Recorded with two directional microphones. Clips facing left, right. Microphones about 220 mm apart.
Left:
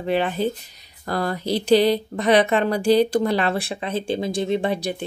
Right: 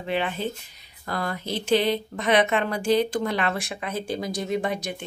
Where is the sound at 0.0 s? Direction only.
40° left (ahead or behind).